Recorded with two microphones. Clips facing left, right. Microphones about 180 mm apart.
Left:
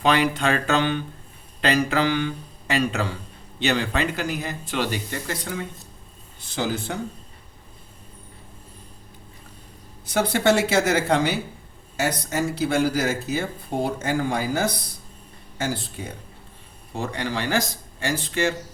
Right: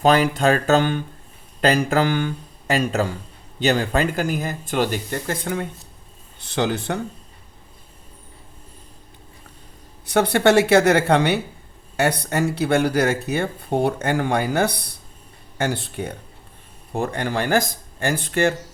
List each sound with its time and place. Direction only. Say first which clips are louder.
0.0 s speech: right 4 dB; 45° right (ahead or behind)
6.4 s speech: right 4 dB; 65° right (ahead or behind)
10.1 s speech: right 4 dB; 60° right (ahead or behind)
16.9 s speech: right 4 dB; 50° right (ahead or behind)